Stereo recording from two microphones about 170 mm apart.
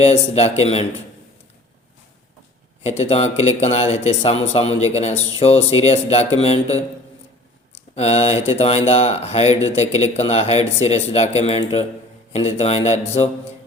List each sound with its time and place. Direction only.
0.0 s speech: 40° left (ahead or behind)
3.0 s speech: 35° left (ahead or behind)
7.9 s speech: 40° left (ahead or behind)